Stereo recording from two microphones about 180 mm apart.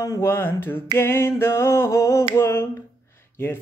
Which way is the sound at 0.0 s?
15° left (ahead or behind).